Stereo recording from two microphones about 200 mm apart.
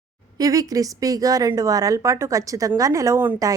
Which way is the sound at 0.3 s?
20° right (ahead or behind).